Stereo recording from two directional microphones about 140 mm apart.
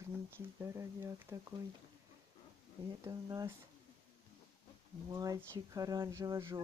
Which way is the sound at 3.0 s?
25° right (ahead or behind).